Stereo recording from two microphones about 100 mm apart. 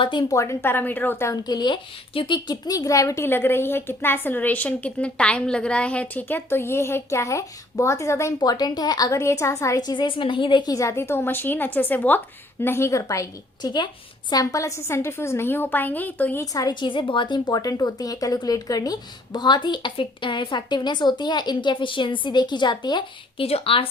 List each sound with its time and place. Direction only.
0.0 s speech: 50° left (ahead or behind)
0.3 s a woman's voice: 25° left (ahead or behind)
1.3 s a woman's voice: 45° left (ahead or behind)
3.2 s a woman's voice: 20° left (ahead or behind)
8.4 s a woman's voice: 45° left (ahead or behind)
10.7 s a woman's voice: 30° left (ahead or behind)
13.6 s speech: 45° left (ahead or behind)
14.5 s a woman's voice: 30° left (ahead or behind)
16.4 s speech: 35° left (ahead or behind)
23.4 s speech: 75° left (ahead or behind)